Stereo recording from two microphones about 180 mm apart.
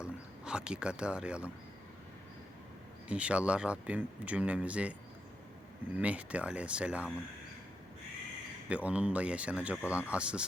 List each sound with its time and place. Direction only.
0.0 s speech: 5° right (ahead or behind)
3.1 s speech: 5° right (ahead or behind)
8.7 s speech: 5° right (ahead or behind)